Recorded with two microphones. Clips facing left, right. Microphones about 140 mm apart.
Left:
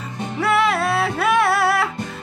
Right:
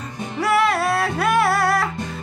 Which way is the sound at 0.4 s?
Centre (ahead or behind).